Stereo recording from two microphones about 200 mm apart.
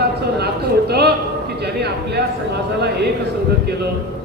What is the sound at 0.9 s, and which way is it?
A man's voice, 55° right (ahead or behind).